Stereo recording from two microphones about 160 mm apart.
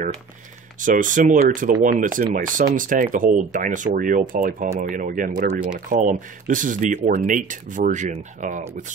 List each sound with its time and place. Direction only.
0.8 s speech: 55° right (ahead or behind)